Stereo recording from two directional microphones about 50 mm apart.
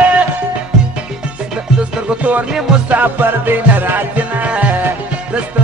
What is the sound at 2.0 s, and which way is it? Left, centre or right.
Music, right.